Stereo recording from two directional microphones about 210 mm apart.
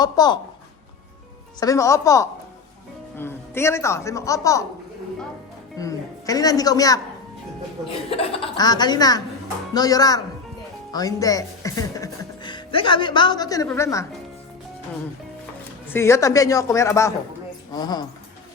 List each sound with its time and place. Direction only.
0.0 s speech: 20° left (ahead or behind)
1.5 s speech: 15° left (ahead or behind)
5.7 s a man's voice: 15° left (ahead or behind)
8.1 s speech: 20° left (ahead or behind)
15.9 s speech: 10° left (ahead or behind)